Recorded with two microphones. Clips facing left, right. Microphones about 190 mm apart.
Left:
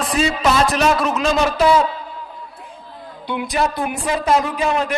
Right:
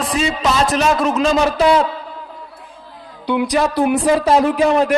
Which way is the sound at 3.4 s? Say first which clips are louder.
Right 4 dB; 80° right.